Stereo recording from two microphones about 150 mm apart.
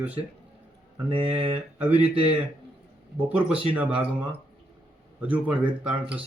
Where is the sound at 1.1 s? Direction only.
35° right (ahead or behind).